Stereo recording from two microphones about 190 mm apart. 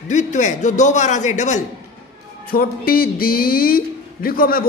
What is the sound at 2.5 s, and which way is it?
A man's voice, 50° left (ahead or behind).